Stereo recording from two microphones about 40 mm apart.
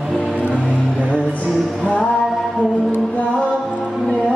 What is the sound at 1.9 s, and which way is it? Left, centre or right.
Music, left.